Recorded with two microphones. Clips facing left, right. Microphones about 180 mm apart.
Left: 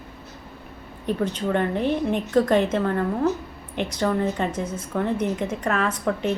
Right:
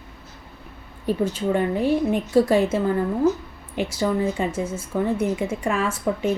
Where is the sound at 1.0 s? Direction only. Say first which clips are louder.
Right 2 dB; 5° right (ahead or behind).